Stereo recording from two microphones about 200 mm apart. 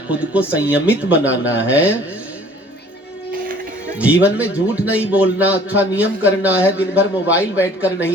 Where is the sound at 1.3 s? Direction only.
65° left (ahead or behind).